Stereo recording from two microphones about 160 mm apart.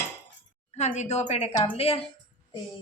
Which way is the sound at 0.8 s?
45° left (ahead or behind).